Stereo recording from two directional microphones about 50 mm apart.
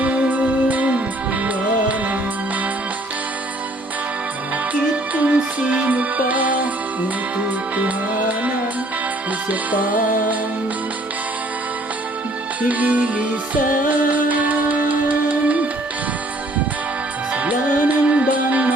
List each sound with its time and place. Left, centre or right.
0.0 s music: right
4.7 s music: right
12.6 s music: right
17.3 s music: right